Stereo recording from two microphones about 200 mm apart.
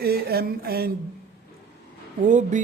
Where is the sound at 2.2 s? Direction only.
35° right (ahead or behind).